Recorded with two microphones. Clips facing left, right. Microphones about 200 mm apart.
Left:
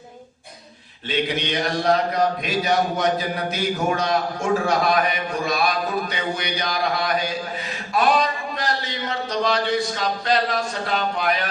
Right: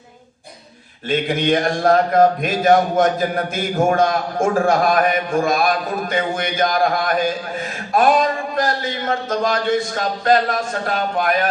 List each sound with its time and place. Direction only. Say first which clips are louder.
1.0 s a man's voice: right 5 dB; 50° right (ahead or behind)